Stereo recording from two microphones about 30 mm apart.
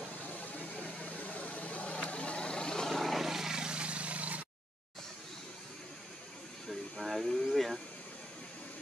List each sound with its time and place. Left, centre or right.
0.7 s vehicle: left
2.9 s vehicle: centre
3.2 s vehicle: centre
3.5 s vehicle: right
6.7 s a sound: centre